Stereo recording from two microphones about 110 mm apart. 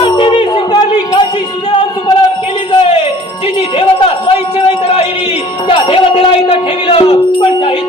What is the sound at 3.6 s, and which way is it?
Speech, 55° left (ahead or behind).